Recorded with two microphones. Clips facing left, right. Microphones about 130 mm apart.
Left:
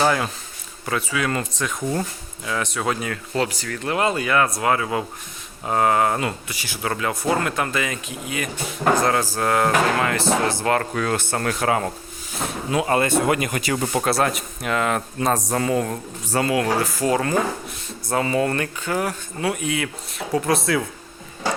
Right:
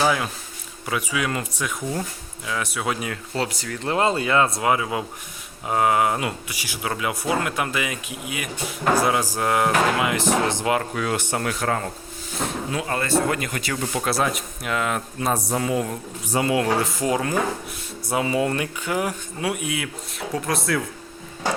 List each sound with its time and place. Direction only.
0.0 s speech: 5° right (ahead or behind)
3.3 s speech: 25° right (ahead or behind)
13.1 s speech: 20° left (ahead or behind)
14.0 s speech: centre (ahead or behind)
16.4 s speech: 25° right (ahead or behind); by 20.8 s centre (ahead or behind)